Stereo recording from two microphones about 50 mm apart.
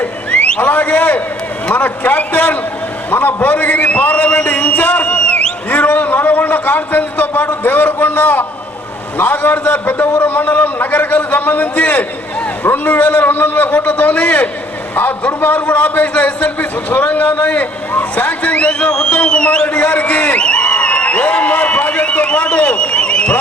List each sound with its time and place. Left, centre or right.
0.0 s a sound: left
0.6 s a man's voice: left
15.3 s a man's voice: left
15.5 s a man's voice: left